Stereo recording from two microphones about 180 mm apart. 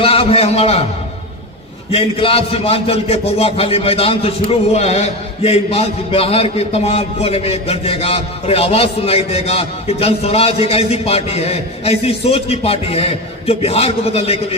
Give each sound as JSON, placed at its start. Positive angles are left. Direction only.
{"t": 0.0, "sound": "a man's voice", "side_deg": 30}
{"t": 1.9, "sound": "a man's voice", "side_deg": 35}